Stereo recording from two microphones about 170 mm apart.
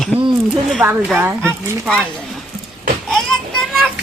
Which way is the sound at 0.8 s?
10° right (ahead or behind).